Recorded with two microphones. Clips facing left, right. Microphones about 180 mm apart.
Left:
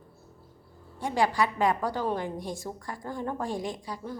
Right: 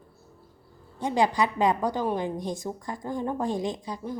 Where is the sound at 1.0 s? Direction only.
20° right (ahead or behind).